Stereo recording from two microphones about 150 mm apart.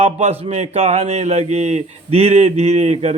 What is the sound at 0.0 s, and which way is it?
A man's voice, 45° right (ahead or behind).